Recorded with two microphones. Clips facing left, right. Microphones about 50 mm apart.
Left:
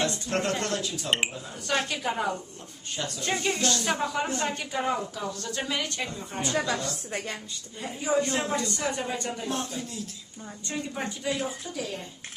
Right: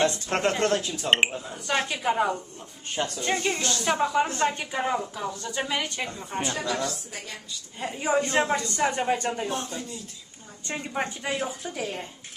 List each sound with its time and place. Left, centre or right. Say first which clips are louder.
0.0 s speech: right 4 dB; right
1.7 s speech: right 2 dB; centre
6.5 s a woman's voice: left 4 dB; left
7.8 s speech: right 1 dB; right
9.5 s speech: even; centre
10.7 s speech: right 3 dB; right